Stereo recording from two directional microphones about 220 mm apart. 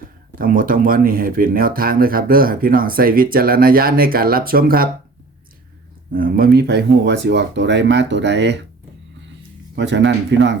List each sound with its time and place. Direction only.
0.3 s speech: 40° right (ahead or behind)
6.1 s speech: 40° right (ahead or behind)
9.7 s speech: 55° right (ahead or behind)